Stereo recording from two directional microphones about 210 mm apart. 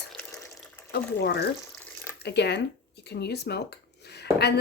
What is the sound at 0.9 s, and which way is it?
Speech, 50° left (ahead or behind).